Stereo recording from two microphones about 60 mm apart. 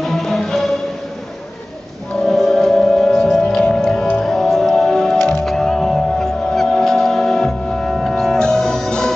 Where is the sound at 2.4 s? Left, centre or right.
Centre.